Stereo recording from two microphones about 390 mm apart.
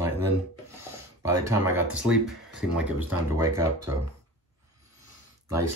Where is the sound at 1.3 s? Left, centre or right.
Centre.